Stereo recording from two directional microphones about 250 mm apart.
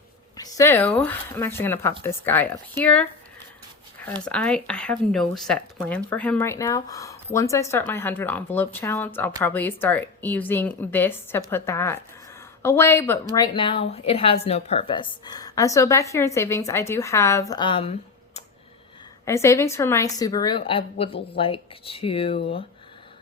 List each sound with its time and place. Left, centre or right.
0.3 s a woman's voice: centre
19.2 s a woman's voice: centre